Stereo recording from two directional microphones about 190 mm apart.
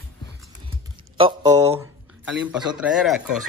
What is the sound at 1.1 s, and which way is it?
Speech, 20° right (ahead or behind).